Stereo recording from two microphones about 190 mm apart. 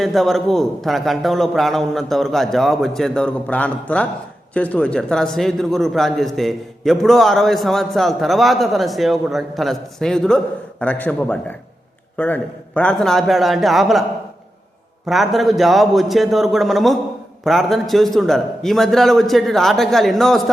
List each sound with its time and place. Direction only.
0.0 s a man's voice: centre (ahead or behind)
15.0 s a man's voice: centre (ahead or behind)